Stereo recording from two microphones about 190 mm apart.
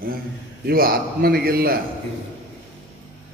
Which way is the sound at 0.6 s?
55° right (ahead or behind).